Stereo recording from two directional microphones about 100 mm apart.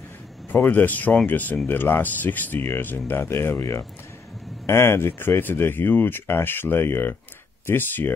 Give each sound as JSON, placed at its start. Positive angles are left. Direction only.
{"t": 0.5, "sound": "speech", "side_deg": 15}